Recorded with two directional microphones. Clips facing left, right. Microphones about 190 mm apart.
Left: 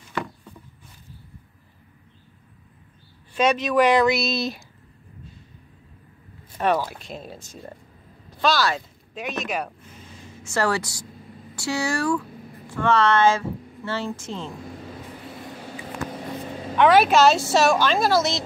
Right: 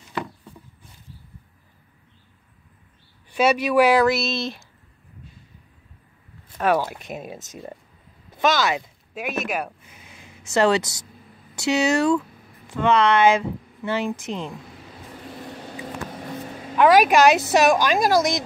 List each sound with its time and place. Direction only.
3.3 s speech: 10° right (ahead or behind)
6.8 s speech: 20° right (ahead or behind)
9.1 s speech: 5° right (ahead or behind)
10.4 s a woman's voice: 20° right (ahead or behind)
16.7 s speech: 10° right (ahead or behind)